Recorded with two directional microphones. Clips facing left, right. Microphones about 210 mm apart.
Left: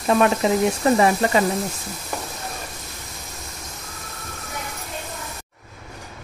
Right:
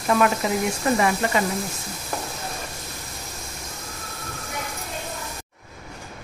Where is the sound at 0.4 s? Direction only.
25° left (ahead or behind).